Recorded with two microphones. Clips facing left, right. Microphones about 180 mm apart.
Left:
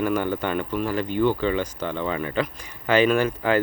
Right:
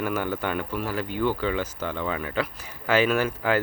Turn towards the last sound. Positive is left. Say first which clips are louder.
# left 3 dB
turn(degrees=-5)  # may be behind; listen again after turning